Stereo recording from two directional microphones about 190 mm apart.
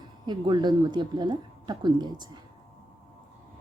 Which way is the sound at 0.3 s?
25° right (ahead or behind).